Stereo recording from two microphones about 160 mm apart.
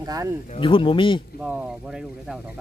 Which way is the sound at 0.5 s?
30° left (ahead or behind).